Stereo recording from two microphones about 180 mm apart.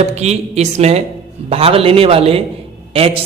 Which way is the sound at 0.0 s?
35° right (ahead or behind).